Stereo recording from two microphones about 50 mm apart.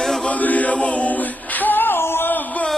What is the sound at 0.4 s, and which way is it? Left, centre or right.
Chant, left.